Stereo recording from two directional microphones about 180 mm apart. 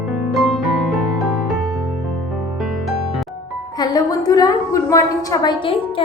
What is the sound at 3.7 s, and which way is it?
A woman's voice, 20° left (ahead or behind).